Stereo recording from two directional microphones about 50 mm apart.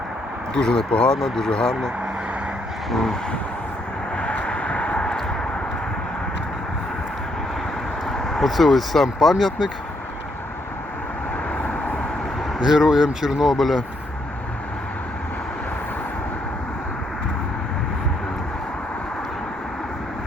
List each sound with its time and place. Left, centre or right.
0.5 s speech: centre
2.9 s speech: centre
4.2 s vehicle: left
8.3 s speech: centre
12.6 s speech: centre